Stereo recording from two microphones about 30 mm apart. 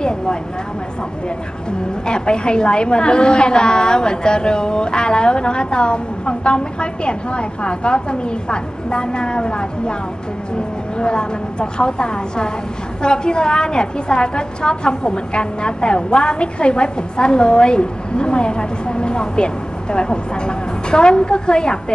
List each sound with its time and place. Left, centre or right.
0.0 s a sound: left
2.0 s a woman's voice: left
11.0 s a woman's voice: left